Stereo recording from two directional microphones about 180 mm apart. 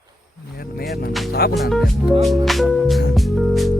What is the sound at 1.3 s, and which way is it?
Speech, 60° left (ahead or behind).